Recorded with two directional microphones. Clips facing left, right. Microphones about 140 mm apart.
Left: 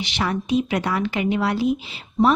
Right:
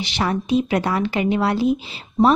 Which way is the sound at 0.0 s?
35° right (ahead or behind).